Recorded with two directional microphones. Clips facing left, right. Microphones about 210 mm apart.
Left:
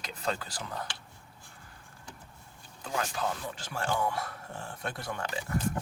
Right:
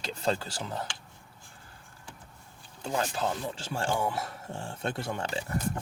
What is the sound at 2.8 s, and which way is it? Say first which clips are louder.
Speech: right 3 dB; 30° right (ahead or behind).